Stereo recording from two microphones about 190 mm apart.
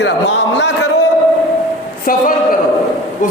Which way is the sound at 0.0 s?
65° left (ahead or behind).